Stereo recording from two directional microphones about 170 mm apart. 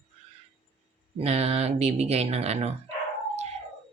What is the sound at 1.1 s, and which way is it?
Speech, 40° right (ahead or behind).